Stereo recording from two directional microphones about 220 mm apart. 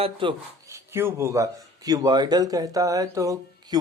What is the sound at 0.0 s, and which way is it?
Speech, 20° right (ahead or behind).